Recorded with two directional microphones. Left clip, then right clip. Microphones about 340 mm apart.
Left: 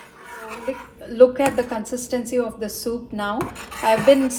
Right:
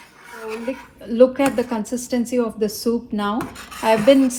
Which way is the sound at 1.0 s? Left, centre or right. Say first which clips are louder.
Even; right.